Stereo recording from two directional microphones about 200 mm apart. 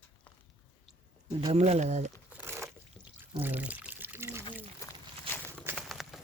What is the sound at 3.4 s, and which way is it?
Pour, 10° right (ahead or behind).